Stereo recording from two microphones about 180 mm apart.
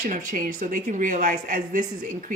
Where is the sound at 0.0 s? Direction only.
45° right (ahead or behind).